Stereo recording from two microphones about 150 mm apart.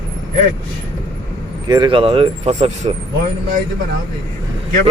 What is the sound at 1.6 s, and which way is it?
Speech, 25° right (ahead or behind).